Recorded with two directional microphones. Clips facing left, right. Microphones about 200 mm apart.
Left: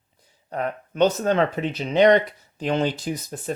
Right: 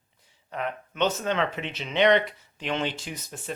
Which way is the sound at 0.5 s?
40° left (ahead or behind).